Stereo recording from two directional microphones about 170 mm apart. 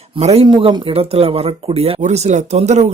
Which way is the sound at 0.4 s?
25° right (ahead or behind).